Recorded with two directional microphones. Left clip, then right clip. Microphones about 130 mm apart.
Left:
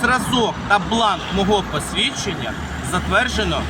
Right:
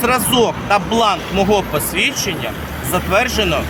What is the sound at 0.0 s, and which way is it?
Speech, 10° right (ahead or behind).